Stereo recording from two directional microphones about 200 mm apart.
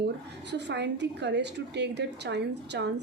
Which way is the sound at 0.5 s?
60° right (ahead or behind).